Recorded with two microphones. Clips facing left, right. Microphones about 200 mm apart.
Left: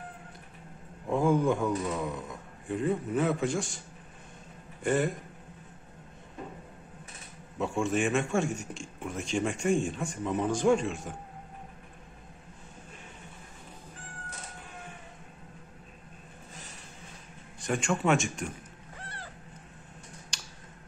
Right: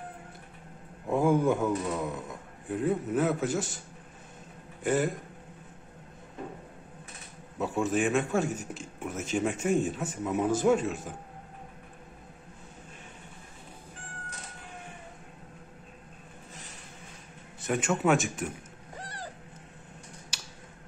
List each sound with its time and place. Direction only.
1.0 s a man's voice: 10° right (ahead or behind)
4.8 s a man's voice: centre (ahead or behind)
7.5 s a man's voice: centre (ahead or behind)
17.6 s speech: 5° right (ahead or behind)
20.3 s computer keyboard: 5° right (ahead or behind)